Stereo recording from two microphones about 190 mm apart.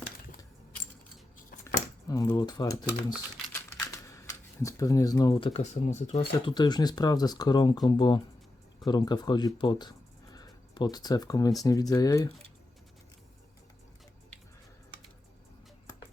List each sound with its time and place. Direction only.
2.0 s speech: 20° left (ahead or behind)
2.8 s speech: 5° right (ahead or behind)
3.5 s a sound: 15° left (ahead or behind)
4.6 s speech: 15° left (ahead or behind)